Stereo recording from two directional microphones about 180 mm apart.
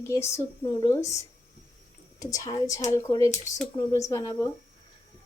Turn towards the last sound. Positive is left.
turn(degrees=20)  # may be behind; listen again after turning